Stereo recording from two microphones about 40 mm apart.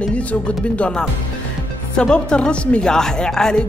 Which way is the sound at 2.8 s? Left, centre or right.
Centre.